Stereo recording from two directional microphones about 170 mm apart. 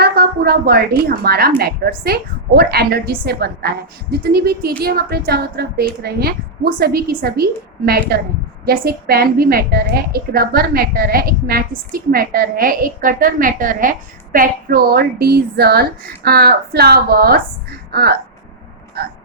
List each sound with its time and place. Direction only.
0.0 s a woman's voice: 65° right (ahead or behind)